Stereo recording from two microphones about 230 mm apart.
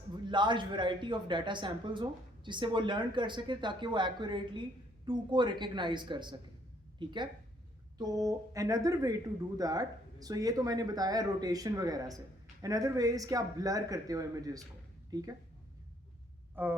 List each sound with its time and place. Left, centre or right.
0.3 s a woman's voice: centre
16.6 s speech: centre